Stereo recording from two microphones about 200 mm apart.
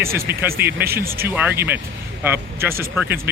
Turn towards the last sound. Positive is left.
turn(degrees=-10)  # may be behind; listen again after turning